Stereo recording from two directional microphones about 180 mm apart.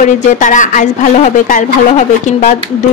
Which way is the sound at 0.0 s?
45° left (ahead or behind).